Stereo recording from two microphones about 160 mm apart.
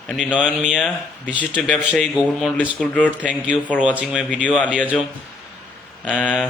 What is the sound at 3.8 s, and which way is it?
Speech, 5° right (ahead or behind).